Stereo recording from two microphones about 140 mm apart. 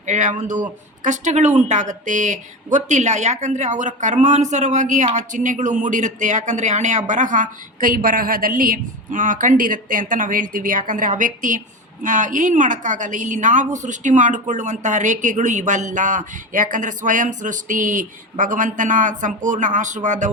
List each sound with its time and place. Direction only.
0.0 s speech: 60° right (ahead or behind)